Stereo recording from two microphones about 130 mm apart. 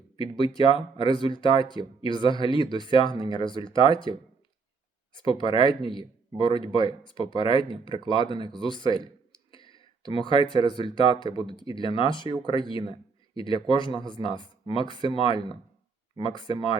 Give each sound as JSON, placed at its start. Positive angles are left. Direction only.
{"t": 0.2, "sound": "a man's voice", "side_deg": 45}
{"t": 5.1, "sound": "a man's voice", "side_deg": 40}
{"t": 9.5, "sound": "a sound", "side_deg": 40}
{"t": 10.8, "sound": "a man's voice", "side_deg": 45}